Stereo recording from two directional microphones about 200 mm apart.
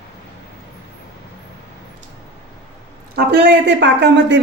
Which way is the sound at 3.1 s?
60° right (ahead or behind).